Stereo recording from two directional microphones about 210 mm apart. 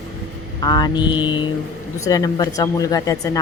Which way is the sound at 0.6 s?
20° left (ahead or behind).